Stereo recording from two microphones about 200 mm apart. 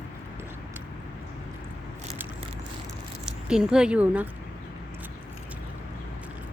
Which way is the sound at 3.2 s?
5° right (ahead or behind).